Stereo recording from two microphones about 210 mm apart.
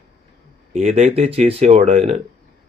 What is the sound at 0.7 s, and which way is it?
Speech, 30° right (ahead or behind).